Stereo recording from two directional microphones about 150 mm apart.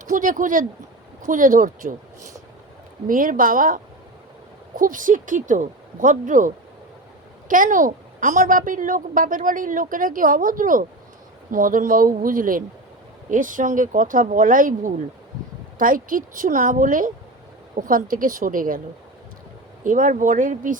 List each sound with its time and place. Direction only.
0.0 s a woman's voice: 60° right (ahead or behind)
3.1 s speech: 65° right (ahead or behind)
4.8 s a woman's voice: 60° right (ahead or behind)
19.8 s a woman's voice: 60° right (ahead or behind)